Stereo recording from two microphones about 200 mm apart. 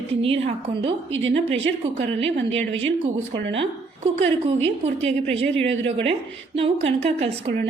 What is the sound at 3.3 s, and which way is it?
Speech, 65° right (ahead or behind).